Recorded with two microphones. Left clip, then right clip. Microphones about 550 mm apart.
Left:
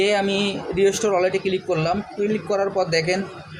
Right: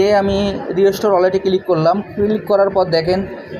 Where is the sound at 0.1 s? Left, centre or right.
Left.